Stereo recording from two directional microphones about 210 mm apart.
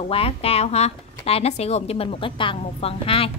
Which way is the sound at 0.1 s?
30° left (ahead or behind).